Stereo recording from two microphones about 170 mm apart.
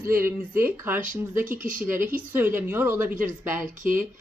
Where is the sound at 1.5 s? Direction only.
50° right (ahead or behind).